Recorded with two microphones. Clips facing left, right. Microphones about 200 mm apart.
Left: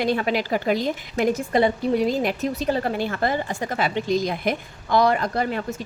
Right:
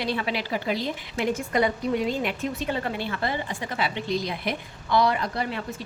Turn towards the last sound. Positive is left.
turn(degrees=45)  # may be behind; listen again after turning